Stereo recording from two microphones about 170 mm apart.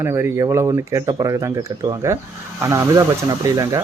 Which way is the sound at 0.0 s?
15° right (ahead or behind).